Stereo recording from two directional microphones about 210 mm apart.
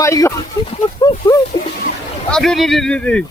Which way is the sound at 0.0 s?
15° left (ahead or behind).